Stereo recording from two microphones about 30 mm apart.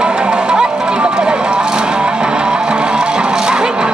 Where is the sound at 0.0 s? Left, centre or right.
Right.